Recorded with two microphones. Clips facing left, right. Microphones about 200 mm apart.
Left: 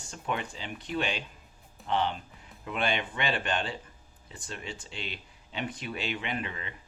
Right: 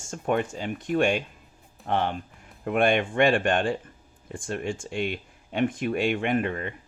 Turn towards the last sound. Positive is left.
turn(degrees=-50)  # may be behind; listen again after turning